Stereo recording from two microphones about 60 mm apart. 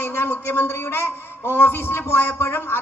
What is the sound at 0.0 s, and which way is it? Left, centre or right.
A man's voice, left.